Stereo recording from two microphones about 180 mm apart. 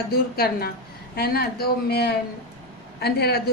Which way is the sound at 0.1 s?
55° left (ahead or behind).